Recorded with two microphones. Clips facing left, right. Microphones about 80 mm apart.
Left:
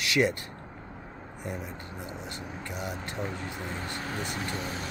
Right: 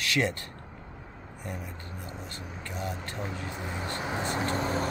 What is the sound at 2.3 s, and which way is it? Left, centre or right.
Speech, centre.